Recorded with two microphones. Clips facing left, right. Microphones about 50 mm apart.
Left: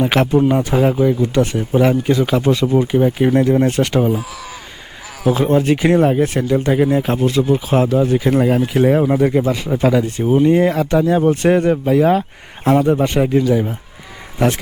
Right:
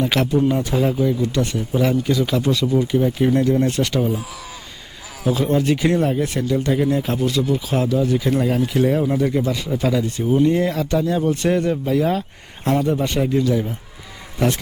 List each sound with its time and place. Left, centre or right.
0.0 s speech: left
5.3 s speech: left